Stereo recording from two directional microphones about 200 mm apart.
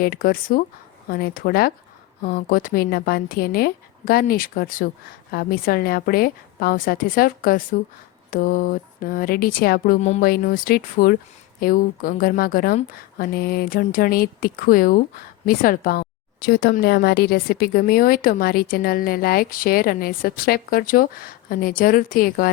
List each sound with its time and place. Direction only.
0.0 s a woman's voice: 45° left (ahead or behind)